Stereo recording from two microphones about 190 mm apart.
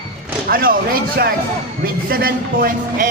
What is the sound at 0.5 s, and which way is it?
A man's voice, 50° right (ahead or behind).